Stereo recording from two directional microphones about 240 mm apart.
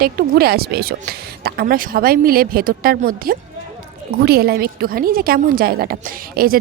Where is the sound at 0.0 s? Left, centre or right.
Right.